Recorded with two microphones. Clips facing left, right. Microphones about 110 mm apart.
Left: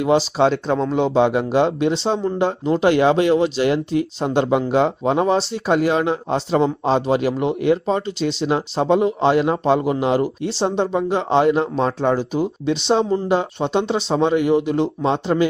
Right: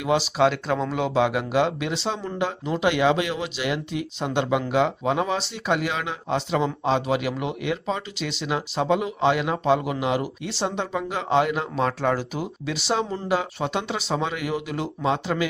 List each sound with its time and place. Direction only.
0.0 s speech: 35° left (ahead or behind)